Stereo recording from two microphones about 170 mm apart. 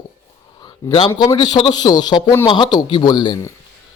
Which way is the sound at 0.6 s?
25° left (ahead or behind).